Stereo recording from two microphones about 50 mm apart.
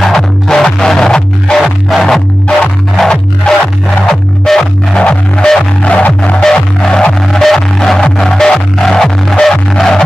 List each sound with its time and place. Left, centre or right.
0.0 s music: centre
1.9 s music: centre
3.1 s music: centre
6.4 s music: centre
7.2 s music: centre